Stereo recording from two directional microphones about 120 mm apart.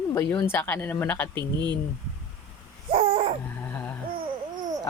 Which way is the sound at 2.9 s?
50° right (ahead or behind).